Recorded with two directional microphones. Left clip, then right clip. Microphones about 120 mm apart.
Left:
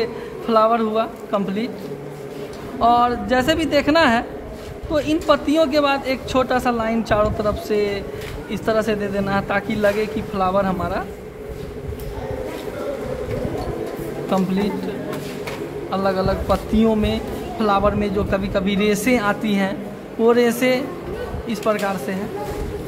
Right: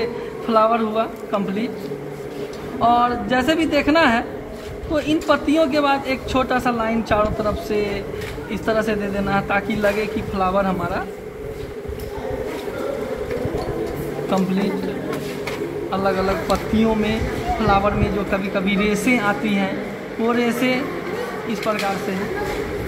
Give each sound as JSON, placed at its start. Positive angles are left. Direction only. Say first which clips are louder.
{"t": 0.0, "sound": "speech", "louder": "even", "side_deg": 40}
{"t": 2.8, "sound": "a man's voice", "louder": "left 1 dB", "side_deg": 45}
{"t": 14.3, "sound": "a man's voice", "louder": "left 1 dB", "side_deg": 50}
{"t": 15.9, "sound": "a man's voice", "louder": "even", "side_deg": 50}
{"t": 21.5, "sound": "speech", "louder": "left 2 dB", "side_deg": 70}